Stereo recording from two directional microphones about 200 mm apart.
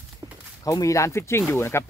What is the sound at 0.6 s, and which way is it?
Speech, 15° left (ahead or behind).